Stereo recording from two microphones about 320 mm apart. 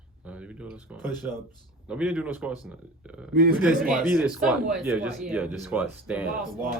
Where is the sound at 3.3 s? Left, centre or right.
Right.